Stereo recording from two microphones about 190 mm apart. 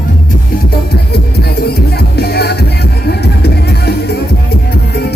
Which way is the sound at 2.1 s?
55° left (ahead or behind).